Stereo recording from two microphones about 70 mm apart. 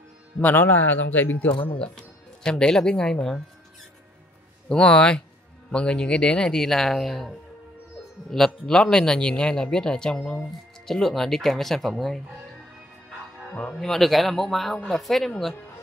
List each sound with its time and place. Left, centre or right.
0.4 s a man's voice: left
1.8 s speech: centre
4.6 s a man's voice: centre
13.5 s speech: centre